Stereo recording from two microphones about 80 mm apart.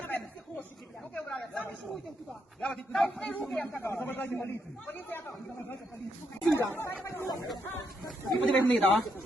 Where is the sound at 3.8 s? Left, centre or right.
Left.